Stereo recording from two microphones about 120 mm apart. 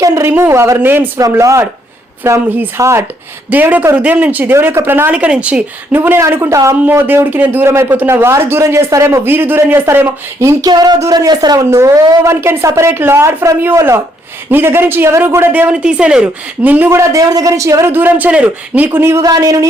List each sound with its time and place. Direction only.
0.0 s speech: 25° right (ahead or behind)
10.7 s speech: 35° right (ahead or behind); by 17.0 s 15° right (ahead or behind)
17.0 s speech: 30° right (ahead or behind); by 18.9 s 10° right (ahead or behind)
18.9 s speech: 20° right (ahead or behind)